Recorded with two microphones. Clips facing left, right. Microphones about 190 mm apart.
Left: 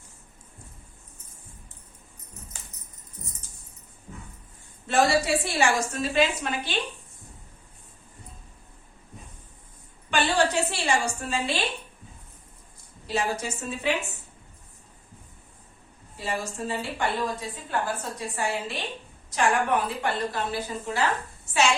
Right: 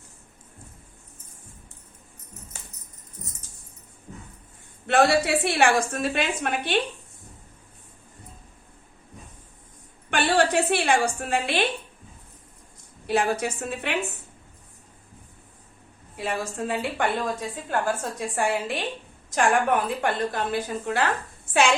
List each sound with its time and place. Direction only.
4.9 s a woman's voice: 65° right (ahead or behind)
10.1 s a sound: 60° right (ahead or behind)
13.1 s a woman's voice: 55° right (ahead or behind)
16.1 s a woman's voice: 60° right (ahead or behind)